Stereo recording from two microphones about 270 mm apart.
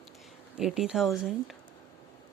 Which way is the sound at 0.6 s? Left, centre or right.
Centre.